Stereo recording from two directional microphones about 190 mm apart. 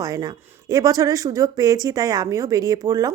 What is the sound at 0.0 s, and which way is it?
A woman's voice, 20° right (ahead or behind).